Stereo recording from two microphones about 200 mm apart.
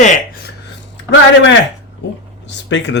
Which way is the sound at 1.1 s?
65° left (ahead or behind).